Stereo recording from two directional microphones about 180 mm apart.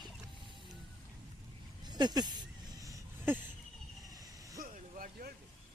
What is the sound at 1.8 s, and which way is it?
Speech, 20° right (ahead or behind).